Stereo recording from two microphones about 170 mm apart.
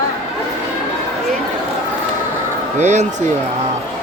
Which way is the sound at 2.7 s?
45° right (ahead or behind).